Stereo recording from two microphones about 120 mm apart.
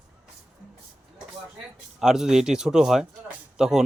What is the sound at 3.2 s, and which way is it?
Music, 5° right (ahead or behind).